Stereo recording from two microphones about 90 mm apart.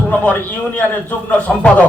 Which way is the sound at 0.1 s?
20° left (ahead or behind).